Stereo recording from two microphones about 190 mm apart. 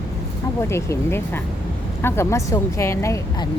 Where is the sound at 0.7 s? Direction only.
15° left (ahead or behind).